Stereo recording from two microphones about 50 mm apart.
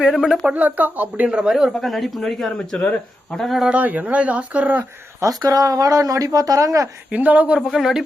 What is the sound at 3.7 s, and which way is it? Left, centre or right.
Speech, right.